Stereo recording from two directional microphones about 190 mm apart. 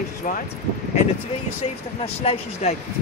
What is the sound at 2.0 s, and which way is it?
Speech, 35° left (ahead or behind).